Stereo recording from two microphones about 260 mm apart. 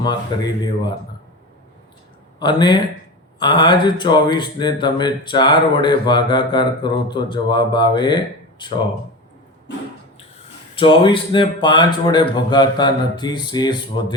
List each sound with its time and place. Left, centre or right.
0.0 s speech: centre
2.4 s speech: centre
10.8 s speech: centre